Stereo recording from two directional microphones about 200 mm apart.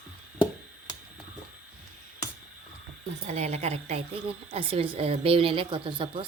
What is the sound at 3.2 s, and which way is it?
A woman's voice, 35° right (ahead or behind).